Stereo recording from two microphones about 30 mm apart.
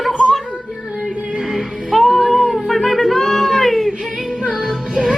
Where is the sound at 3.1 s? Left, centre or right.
Centre.